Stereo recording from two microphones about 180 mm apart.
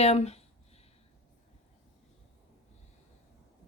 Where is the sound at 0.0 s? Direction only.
35° left (ahead or behind).